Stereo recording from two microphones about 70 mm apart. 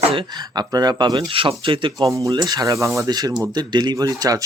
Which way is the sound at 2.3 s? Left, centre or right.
Right.